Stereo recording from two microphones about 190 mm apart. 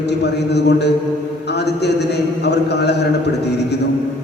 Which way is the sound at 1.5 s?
60° left (ahead or behind).